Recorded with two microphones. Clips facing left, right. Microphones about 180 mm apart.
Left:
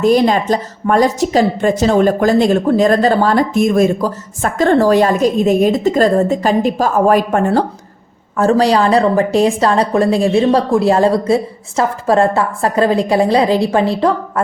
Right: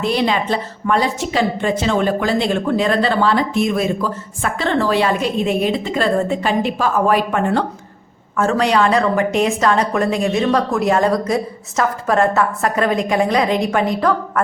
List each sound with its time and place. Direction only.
0.0 s a woman's voice: 45° left (ahead or behind); by 14.4 s 30° left (ahead or behind)